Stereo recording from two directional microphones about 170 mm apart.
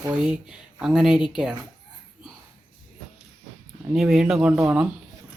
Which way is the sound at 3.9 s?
Centre (ahead or behind).